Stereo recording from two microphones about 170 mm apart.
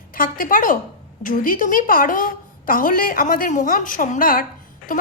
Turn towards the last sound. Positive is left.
turn(degrees=50)  # may be behind; listen again after turning